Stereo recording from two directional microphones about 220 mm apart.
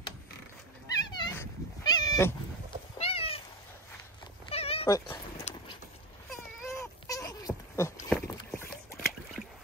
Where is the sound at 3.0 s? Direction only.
25° left (ahead or behind).